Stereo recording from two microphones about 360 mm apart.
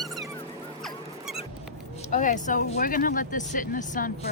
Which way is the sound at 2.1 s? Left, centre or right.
Left.